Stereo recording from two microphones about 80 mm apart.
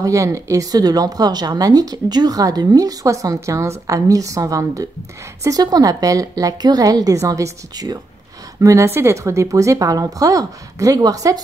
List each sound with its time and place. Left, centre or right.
0.0 s speech: right
8.5 s speech: right